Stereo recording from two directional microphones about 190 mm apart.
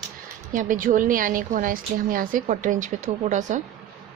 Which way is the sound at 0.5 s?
45° right (ahead or behind).